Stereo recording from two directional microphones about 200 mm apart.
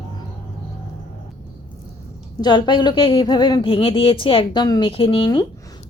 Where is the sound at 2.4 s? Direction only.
20° left (ahead or behind).